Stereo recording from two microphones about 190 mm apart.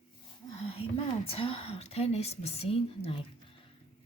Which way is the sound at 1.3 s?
30° left (ahead or behind).